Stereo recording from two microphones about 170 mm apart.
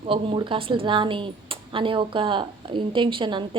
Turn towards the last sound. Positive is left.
turn(degrees=-30)  # may be behind; listen again after turning